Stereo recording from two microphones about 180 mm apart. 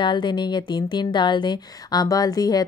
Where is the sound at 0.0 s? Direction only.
25° left (ahead or behind).